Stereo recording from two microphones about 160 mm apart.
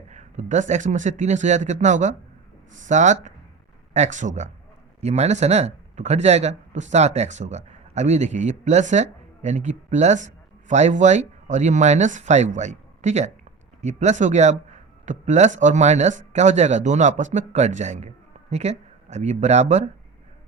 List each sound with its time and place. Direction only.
0.1 s speech: 50° right (ahead or behind)